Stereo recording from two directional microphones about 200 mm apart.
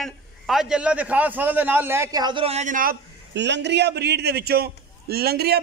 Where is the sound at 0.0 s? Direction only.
Centre (ahead or behind).